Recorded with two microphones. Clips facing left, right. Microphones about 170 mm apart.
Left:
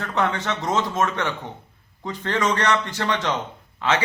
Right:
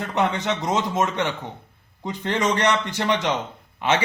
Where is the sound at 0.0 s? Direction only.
20° right (ahead or behind).